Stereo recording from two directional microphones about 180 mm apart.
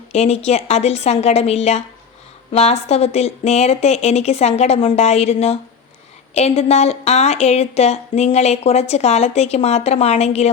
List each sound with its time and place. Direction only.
0.1 s a woman's voice: 35° left (ahead or behind)